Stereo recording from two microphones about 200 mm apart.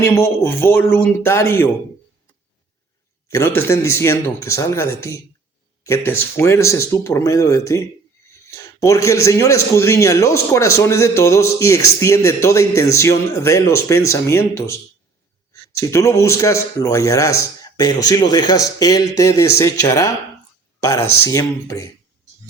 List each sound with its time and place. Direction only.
0.0 s a man's voice: 15° left (ahead or behind)
3.2 s a man's voice: 15° left (ahead or behind)